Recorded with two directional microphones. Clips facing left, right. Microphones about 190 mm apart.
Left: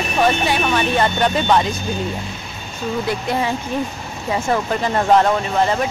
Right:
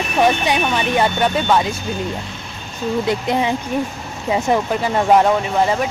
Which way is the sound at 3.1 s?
20° right (ahead or behind).